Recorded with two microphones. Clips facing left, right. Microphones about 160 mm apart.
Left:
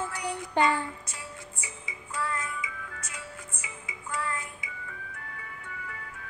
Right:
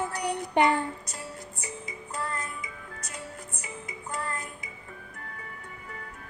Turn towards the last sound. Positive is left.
turn(degrees=-40)  # may be behind; listen again after turning